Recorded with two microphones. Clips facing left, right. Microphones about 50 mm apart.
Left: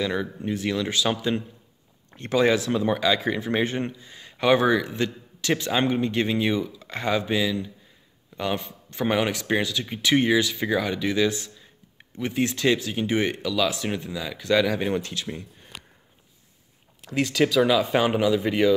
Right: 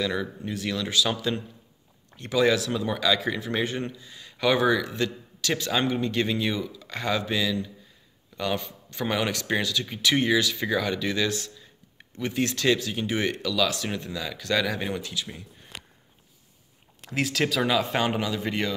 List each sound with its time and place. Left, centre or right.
0.0 s speech: left
2.1 s speech: left; by 15.0 s centre
15.0 s speech: left
17.0 s speech: centre